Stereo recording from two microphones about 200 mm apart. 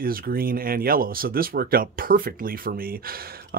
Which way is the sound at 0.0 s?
45° right (ahead or behind).